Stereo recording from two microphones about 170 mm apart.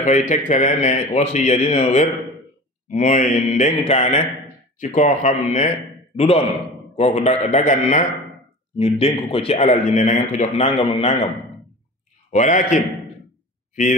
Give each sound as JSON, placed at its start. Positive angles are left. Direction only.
{"t": 0.0, "sound": "speech", "side_deg": 45}
{"t": 12.3, "sound": "speech", "side_deg": 45}